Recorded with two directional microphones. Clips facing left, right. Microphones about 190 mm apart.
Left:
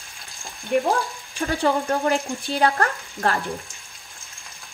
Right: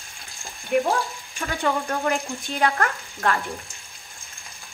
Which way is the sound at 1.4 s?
30° left (ahead or behind).